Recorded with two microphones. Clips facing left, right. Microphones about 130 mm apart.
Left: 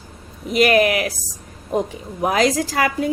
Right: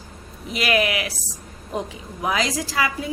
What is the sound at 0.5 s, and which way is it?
Speech, 45° left (ahead or behind).